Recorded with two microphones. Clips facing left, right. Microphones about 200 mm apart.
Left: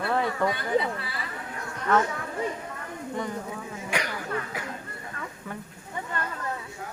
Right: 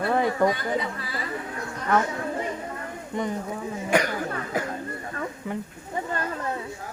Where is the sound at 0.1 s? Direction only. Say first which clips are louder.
Right 4 dB; 15° right (ahead or behind).